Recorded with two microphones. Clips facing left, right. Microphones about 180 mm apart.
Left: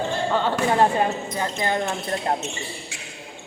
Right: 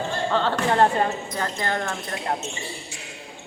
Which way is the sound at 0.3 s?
10° left (ahead or behind).